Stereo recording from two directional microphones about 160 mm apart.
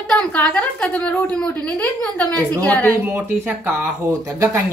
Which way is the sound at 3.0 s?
10° right (ahead or behind).